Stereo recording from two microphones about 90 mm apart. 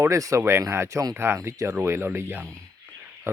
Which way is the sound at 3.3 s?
30° right (ahead or behind).